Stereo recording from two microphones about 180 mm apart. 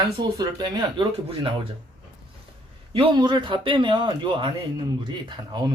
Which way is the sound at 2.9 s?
25° right (ahead or behind).